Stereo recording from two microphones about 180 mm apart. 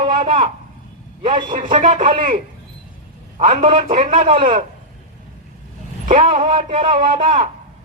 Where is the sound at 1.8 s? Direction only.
45° right (ahead or behind).